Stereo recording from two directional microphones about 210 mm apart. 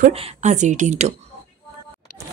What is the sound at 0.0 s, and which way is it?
A woman's voice, 35° right (ahead or behind).